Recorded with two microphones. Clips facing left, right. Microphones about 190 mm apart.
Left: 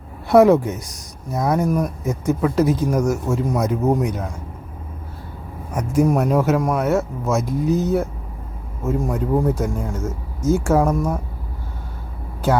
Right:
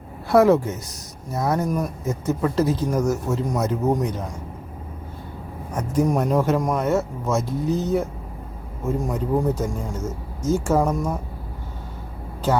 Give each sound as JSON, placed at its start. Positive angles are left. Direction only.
{"t": 0.3, "sound": "speech", "side_deg": 20}
{"t": 5.7, "sound": "speech", "side_deg": 10}